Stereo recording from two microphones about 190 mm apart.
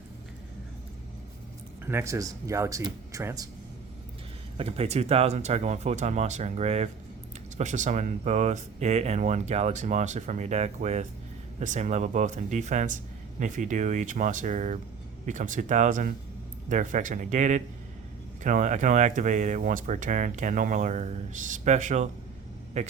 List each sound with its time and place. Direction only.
1.8 s speech: 10° right (ahead or behind)
4.5 s speech: 30° right (ahead or behind)